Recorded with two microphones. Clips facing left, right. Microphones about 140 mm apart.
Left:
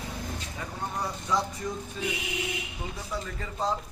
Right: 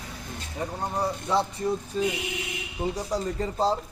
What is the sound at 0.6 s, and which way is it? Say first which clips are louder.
Speech: right 6 dB; 35° right (ahead or behind).